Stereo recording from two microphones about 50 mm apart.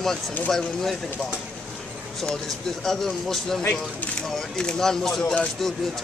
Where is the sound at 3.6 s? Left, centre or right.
Left.